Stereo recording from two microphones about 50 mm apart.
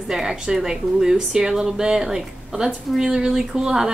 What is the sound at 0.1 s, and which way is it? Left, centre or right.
Speech, centre.